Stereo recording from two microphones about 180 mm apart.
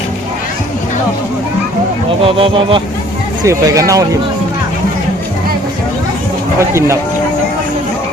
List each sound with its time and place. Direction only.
2.2 s speech: 30° right (ahead or behind)
3.4 s speech: 15° right (ahead or behind)
6.6 s speech: 15° right (ahead or behind)